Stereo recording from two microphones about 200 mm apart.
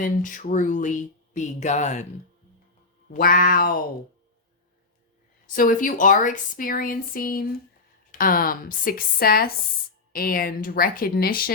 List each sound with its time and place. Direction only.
0.0 s speech: 40° left (ahead or behind)
3.1 s a woman's voice: 45° left (ahead or behind)
5.5 s a woman's voice: 45° left (ahead or behind)